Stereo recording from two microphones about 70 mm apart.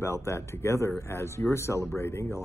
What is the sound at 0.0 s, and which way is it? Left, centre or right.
Speech, left.